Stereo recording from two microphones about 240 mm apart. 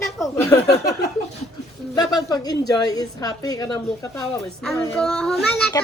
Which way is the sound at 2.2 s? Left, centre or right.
Centre.